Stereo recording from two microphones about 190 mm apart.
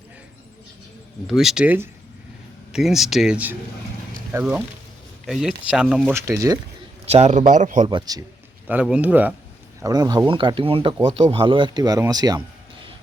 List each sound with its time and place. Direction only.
1.3 s speech: centre (ahead or behind)
6.1 s speech: 15° right (ahead or behind)
7.0 s a man's voice: 35° right (ahead or behind)
7.9 s speech: 20° right (ahead or behind)
8.6 s speech: 5° right (ahead or behind)
9.8 s speech: 20° right (ahead or behind)